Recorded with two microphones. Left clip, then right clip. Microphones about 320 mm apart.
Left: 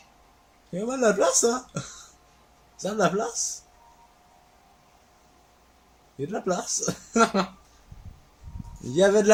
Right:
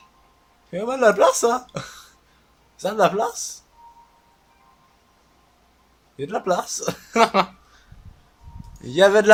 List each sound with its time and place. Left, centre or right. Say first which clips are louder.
0.9 s speech: right 6 dB; right
6.5 s speech: right 5 dB; right
8.9 s speech: right 5 dB; right